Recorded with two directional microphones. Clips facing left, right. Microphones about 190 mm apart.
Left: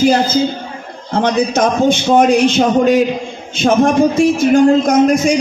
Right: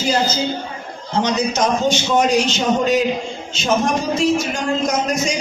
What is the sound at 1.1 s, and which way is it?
A man's voice, 55° left (ahead or behind).